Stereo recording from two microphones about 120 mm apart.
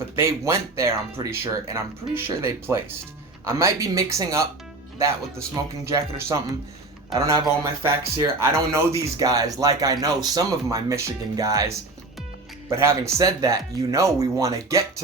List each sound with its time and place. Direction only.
0.2 s speech: 25° right (ahead or behind)
5.8 s speech: 20° right (ahead or behind)